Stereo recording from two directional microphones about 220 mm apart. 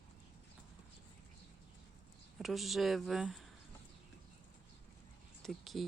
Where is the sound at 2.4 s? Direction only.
Centre (ahead or behind).